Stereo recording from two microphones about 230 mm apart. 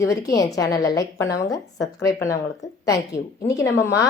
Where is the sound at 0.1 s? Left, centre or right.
Centre.